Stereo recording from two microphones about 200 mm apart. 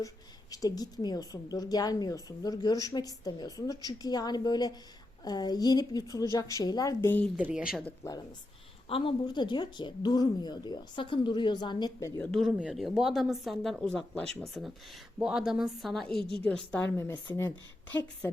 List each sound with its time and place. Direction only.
0.5 s a woman's voice: 20° left (ahead or behind)
7.3 s speech: 5° right (ahead or behind)
8.9 s a woman's voice: 25° left (ahead or behind)
12.3 s a woman's voice: centre (ahead or behind)